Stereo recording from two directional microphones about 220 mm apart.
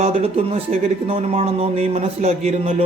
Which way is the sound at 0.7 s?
25° right (ahead or behind).